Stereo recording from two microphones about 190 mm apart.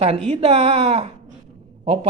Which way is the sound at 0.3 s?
35° right (ahead or behind).